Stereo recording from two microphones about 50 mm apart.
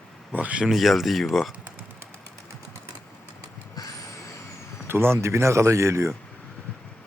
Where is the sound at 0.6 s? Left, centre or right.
Centre.